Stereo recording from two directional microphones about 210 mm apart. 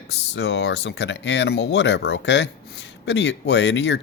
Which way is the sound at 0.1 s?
55° left (ahead or behind).